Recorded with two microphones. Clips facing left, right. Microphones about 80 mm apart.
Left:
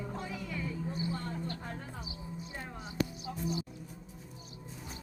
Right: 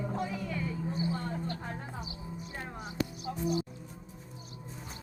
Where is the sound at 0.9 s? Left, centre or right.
Right.